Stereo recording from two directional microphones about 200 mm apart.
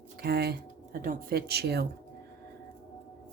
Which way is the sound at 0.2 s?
50° right (ahead or behind).